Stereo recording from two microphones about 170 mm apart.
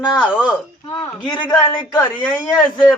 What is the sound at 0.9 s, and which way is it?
A woman's voice, 25° left (ahead or behind).